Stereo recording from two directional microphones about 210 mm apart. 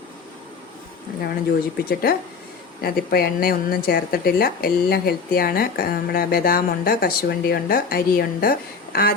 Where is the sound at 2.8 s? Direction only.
45° left (ahead or behind).